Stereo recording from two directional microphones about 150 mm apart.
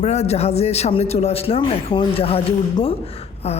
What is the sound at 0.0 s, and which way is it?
Speech, 45° left (ahead or behind).